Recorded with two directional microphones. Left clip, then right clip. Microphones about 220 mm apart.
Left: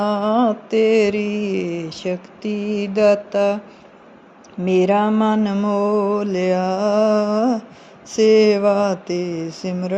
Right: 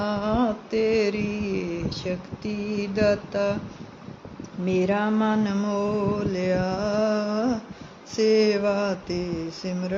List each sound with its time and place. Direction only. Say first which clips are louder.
0.0 s mantra: left 7 dB; 20° left (ahead or behind)
4.6 s mantra: left 8 dB; 25° left (ahead or behind)